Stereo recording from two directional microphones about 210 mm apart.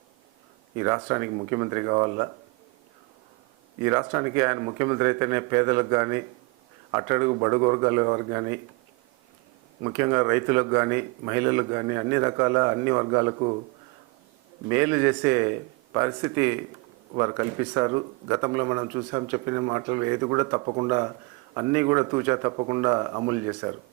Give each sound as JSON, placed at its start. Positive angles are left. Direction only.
{"t": 0.8, "sound": "a man's voice", "side_deg": -15}
{"t": 3.8, "sound": "a man's voice", "side_deg": -15}
{"t": 9.8, "sound": "a man's voice", "side_deg": -15}
{"t": 14.7, "sound": "a man's voice", "side_deg": -10}